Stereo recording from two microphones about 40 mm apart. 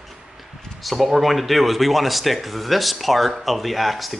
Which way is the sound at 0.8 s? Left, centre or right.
Centre.